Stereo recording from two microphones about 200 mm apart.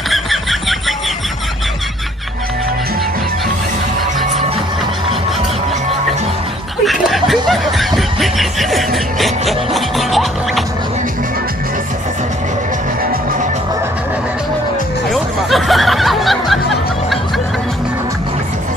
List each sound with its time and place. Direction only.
0.1 s a sound: centre (ahead or behind)
6.8 s snicker: centre (ahead or behind)
9.5 s music: centre (ahead or behind)
13.0 s music: 45° right (ahead or behind)
15.1 s music: centre (ahead or behind)